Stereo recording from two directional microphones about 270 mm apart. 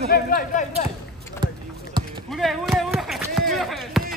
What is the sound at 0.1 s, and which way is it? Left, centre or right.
Speech, left.